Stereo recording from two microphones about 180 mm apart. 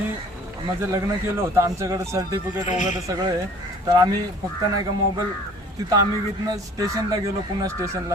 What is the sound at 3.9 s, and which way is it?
Speech, 20° right (ahead or behind).